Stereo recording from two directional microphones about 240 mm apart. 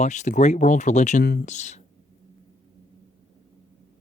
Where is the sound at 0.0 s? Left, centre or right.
Left.